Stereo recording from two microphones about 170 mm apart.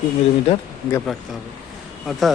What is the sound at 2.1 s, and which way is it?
Speech, centre (ahead or behind).